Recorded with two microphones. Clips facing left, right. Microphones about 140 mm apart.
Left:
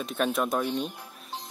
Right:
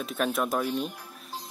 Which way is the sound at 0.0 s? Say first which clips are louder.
Left 1 dB; centre (ahead or behind).